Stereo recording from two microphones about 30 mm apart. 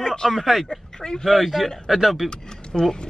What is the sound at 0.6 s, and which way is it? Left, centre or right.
Speech, left.